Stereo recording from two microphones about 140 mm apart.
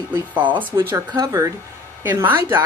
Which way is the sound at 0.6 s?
15° right (ahead or behind).